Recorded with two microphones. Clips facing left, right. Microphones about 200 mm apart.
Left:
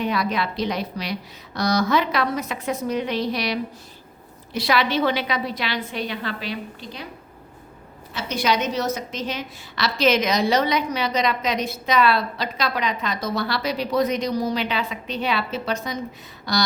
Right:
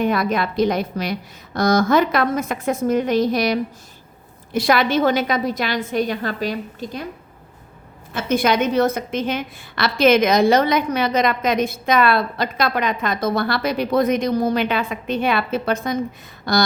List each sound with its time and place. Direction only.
0.0 s a woman's voice: 50° right (ahead or behind)
8.1 s a woman's voice: 50° right (ahead or behind)